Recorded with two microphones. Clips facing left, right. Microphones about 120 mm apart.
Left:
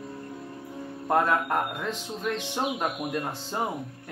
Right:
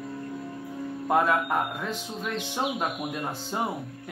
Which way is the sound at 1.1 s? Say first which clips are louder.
Even; 5° right (ahead or behind).